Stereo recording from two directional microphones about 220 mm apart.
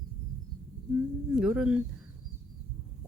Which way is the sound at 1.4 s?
5° right (ahead or behind).